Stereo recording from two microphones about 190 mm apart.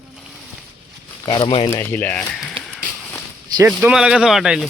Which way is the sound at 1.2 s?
25° left (ahead or behind).